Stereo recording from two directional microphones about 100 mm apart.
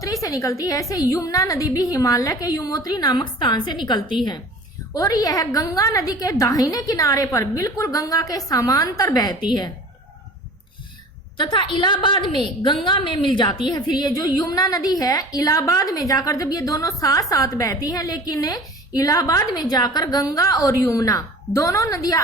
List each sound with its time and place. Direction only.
0.0 s a woman's voice: 35° left (ahead or behind); by 4.2 s 50° left (ahead or behind)
4.9 s a woman's voice: 35° left (ahead or behind)
11.3 s a woman's voice: 55° left (ahead or behind); by 22.2 s 35° left (ahead or behind)